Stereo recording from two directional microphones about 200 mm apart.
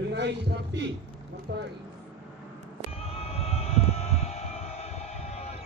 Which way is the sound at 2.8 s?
30° left (ahead or behind).